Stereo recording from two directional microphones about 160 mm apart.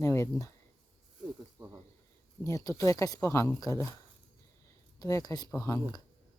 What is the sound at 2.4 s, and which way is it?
Speech, 20° left (ahead or behind).